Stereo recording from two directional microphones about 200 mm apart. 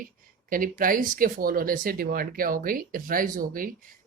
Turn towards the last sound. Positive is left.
turn(degrees=-45)  # may be behind; listen again after turning